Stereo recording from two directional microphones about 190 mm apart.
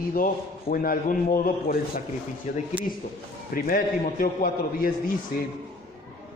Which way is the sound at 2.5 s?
40° left (ahead or behind).